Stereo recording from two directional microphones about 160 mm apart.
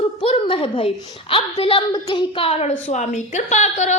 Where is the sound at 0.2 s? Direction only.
35° left (ahead or behind).